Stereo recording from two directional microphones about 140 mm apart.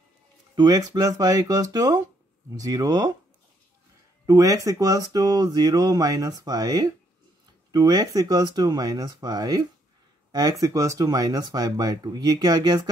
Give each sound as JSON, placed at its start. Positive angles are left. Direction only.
{"t": 0.6, "sound": "speech", "side_deg": -30}
{"t": 4.3, "sound": "speech", "side_deg": -25}
{"t": 10.6, "sound": "speech", "side_deg": -25}